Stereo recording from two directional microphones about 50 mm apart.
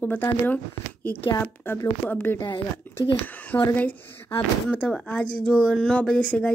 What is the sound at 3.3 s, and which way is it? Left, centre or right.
Speech, left.